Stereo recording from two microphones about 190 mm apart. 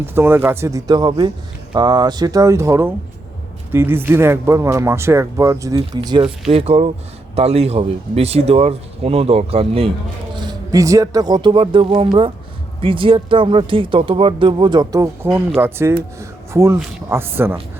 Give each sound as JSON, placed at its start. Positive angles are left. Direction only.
{"t": 0.0, "sound": "speech", "side_deg": -10}